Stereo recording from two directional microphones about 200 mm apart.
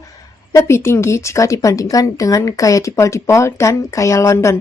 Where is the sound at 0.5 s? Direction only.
15° left (ahead or behind).